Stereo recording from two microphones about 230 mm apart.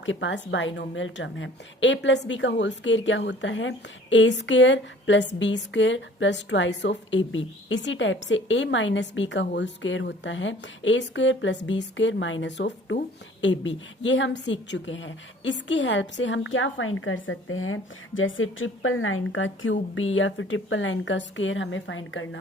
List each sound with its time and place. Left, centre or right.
0.0 s a woman's voice: left